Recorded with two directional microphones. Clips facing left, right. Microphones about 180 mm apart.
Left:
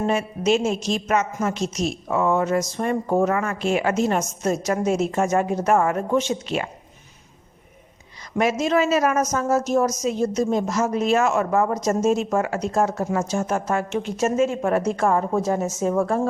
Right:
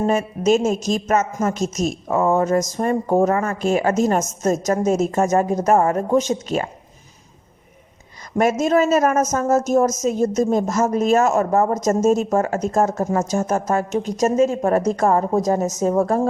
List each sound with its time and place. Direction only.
0.0 s a woman's voice: 40° right (ahead or behind)
8.4 s a woman's voice: 45° right (ahead or behind)